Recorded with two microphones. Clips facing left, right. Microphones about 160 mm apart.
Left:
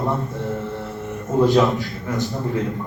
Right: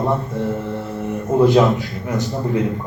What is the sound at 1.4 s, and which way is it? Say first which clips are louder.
A man's voice: right 2 dB; 20° right (ahead or behind).